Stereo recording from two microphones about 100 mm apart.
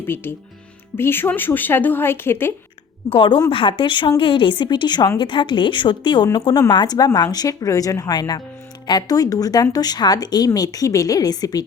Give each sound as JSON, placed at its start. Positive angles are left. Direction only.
{"t": 0.0, "sound": "speech", "side_deg": 20}
{"t": 3.1, "sound": "a woman's voice", "side_deg": 55}